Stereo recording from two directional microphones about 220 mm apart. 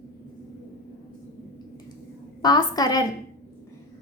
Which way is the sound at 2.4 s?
15° left (ahead or behind).